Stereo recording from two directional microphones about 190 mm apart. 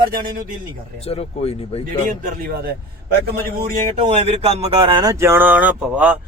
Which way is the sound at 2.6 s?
55° right (ahead or behind).